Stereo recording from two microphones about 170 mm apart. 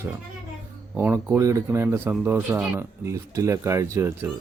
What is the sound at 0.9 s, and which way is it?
Speech, 10° right (ahead or behind).